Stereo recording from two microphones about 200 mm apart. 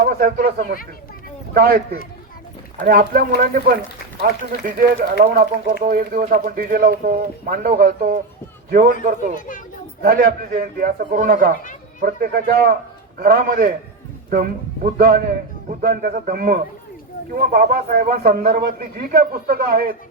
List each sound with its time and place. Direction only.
0.0 s a man's voice: 45° right (ahead or behind)
2.8 s a man's voice: 50° right (ahead or behind)
10.0 s a man's voice: 45° right (ahead or behind)